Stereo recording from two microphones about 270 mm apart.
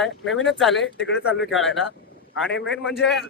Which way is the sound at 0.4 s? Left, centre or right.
Centre.